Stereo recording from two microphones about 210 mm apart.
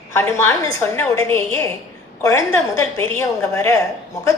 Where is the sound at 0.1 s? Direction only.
10° left (ahead or behind).